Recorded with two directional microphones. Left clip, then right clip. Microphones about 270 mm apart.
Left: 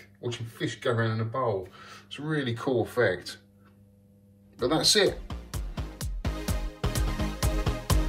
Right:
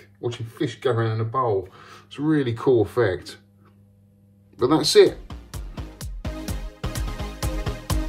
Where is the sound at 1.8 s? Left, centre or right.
Right.